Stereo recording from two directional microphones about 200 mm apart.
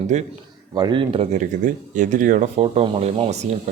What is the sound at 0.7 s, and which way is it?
Speech, 20° right (ahead or behind).